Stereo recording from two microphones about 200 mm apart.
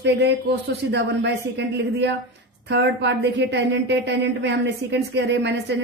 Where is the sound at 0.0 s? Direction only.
55° right (ahead or behind).